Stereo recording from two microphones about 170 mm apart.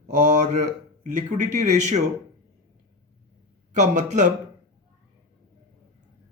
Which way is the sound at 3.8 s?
45° right (ahead or behind).